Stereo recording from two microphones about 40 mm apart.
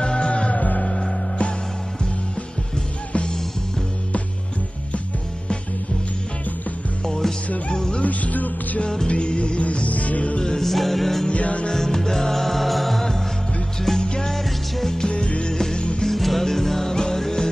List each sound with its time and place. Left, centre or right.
0.0 s music: left
7.1 s music: centre
7.4 s music: left
7.7 s music: centre
8.0 s music: left
8.8 s music: left
10.6 s music: centre
11.3 s music: left
11.7 s music: centre
13.9 s music: left
14.2 s music: centre
15.0 s music: left
15.5 s music: centre